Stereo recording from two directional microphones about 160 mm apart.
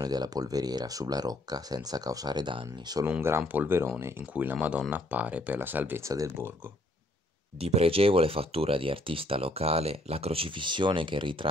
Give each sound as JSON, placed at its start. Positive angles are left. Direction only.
{"t": 0.0, "sound": "speech", "side_deg": -25}
{"t": 3.1, "sound": "speech", "side_deg": -15}
{"t": 7.6, "sound": "speech", "side_deg": -40}